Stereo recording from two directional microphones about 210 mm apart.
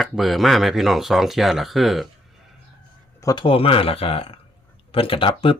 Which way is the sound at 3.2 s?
20° left (ahead or behind).